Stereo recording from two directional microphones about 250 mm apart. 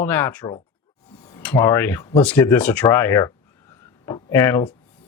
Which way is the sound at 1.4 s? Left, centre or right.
Centre.